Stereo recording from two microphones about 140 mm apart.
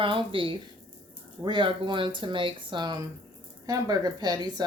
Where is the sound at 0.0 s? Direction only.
35° right (ahead or behind).